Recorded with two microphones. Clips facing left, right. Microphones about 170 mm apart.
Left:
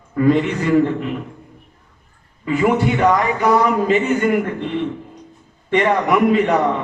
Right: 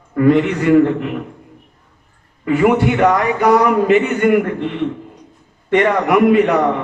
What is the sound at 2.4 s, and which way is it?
A man's voice, 60° right (ahead or behind).